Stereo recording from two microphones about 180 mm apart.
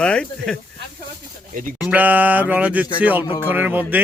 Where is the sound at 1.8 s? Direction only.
10° right (ahead or behind).